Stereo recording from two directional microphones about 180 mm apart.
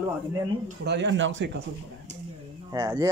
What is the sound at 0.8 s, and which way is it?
Speech, 75° right (ahead or behind).